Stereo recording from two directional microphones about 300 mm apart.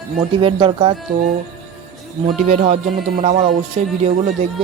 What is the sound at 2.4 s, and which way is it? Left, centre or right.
Speech, right.